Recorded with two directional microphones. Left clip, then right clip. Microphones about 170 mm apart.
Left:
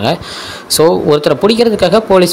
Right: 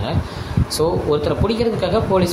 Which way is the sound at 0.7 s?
45° left (ahead or behind).